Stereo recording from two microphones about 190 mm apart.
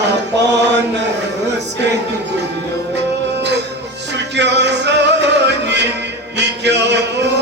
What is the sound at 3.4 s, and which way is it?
Music, 65° right (ahead or behind).